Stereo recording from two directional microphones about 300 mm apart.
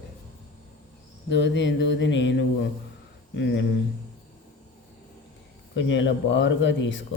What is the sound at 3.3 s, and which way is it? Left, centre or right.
Speech, left.